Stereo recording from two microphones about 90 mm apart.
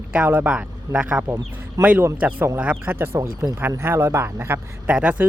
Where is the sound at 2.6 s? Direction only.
15° right (ahead or behind).